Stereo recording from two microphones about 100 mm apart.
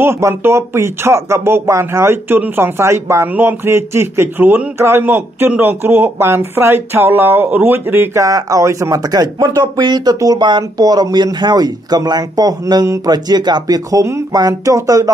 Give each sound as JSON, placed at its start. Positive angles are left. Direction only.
{"t": 0.0, "sound": "speech", "side_deg": -25}
{"t": 13.1, "sound": "speech", "side_deg": -45}